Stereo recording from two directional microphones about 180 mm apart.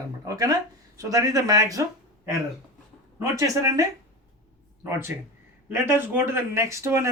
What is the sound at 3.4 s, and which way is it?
Speech, 20° right (ahead or behind).